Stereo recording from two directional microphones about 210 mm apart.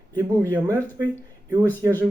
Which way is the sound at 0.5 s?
10° right (ahead or behind).